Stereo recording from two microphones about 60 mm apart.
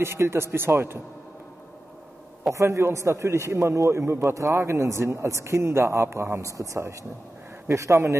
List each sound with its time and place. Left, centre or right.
0.0 s a man's voice: right
2.5 s a man's voice: right
6.5 s speech: right